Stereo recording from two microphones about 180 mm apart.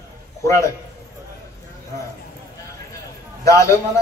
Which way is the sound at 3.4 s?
15° left (ahead or behind).